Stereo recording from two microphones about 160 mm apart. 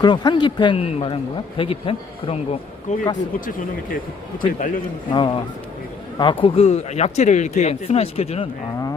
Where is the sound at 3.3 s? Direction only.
60° left (ahead or behind).